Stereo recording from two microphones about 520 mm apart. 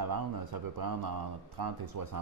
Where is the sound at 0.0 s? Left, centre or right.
Right.